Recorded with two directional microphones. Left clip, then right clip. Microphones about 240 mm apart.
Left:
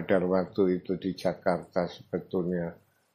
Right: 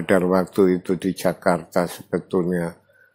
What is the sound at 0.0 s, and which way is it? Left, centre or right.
Speech, right.